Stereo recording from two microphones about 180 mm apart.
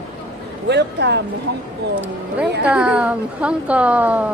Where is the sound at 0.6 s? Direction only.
70° right (ahead or behind).